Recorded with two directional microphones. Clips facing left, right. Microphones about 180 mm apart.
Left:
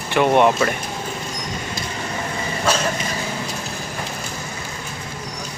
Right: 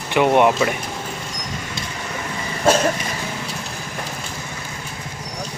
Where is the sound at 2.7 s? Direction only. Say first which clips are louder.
Right 5 dB; 50° right (ahead or behind).